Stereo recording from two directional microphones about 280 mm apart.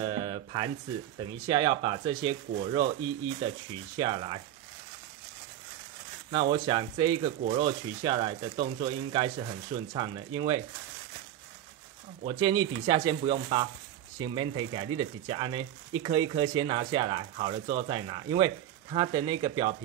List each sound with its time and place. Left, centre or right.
0.0 s a sound: centre
1.5 s speech: centre
3.9 s speech: centre
6.5 s speech: centre
12.2 s speech: centre